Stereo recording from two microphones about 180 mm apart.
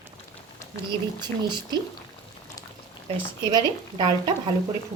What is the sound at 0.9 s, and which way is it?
Speech, 25° right (ahead or behind).